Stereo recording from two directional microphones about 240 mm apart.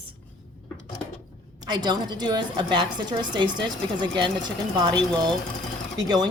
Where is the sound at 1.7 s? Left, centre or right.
Centre.